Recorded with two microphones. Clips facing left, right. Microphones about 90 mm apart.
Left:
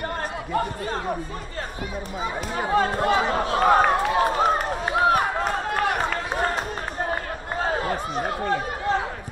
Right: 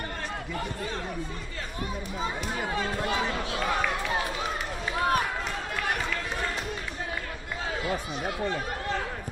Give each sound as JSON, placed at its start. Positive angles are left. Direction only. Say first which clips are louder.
{"t": 0.5, "sound": "speech", "louder": "left 10 dB", "side_deg": 45}
{"t": 2.7, "sound": "run", "louder": "left 11 dB", "side_deg": 40}
{"t": 7.6, "sound": "a sound", "louder": "left 5 dB", "side_deg": 45}